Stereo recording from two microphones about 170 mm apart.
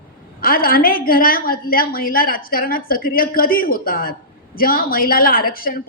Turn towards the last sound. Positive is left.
turn(degrees=60)  # may be behind; listen again after turning